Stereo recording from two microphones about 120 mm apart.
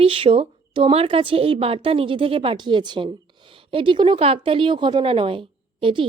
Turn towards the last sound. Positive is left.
turn(degrees=-45)  # may be behind; listen again after turning